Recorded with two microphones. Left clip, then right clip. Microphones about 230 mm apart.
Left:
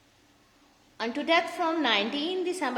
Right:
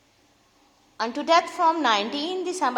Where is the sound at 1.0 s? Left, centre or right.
Centre.